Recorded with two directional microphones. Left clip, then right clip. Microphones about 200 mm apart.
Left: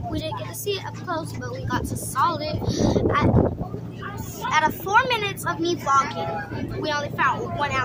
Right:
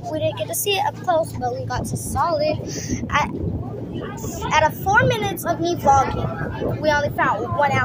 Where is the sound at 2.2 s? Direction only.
10° left (ahead or behind).